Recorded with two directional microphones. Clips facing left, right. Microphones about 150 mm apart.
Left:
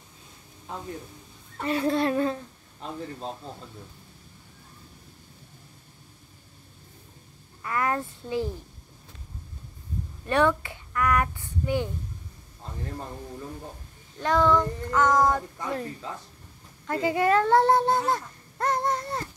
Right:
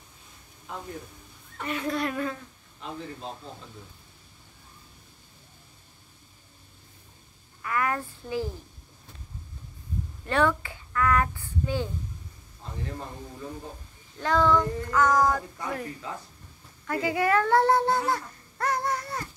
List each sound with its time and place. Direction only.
1.6 s speech: 30° left (ahead or behind)
7.6 s child singing: 25° left (ahead or behind)
10.2 s a child's voice: 20° left (ahead or behind)
14.2 s child singing: 15° left (ahead or behind)
16.8 s a child's voice: 25° left (ahead or behind)